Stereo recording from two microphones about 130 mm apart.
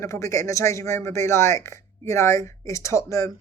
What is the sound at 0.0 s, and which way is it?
A woman's voice, 25° left (ahead or behind).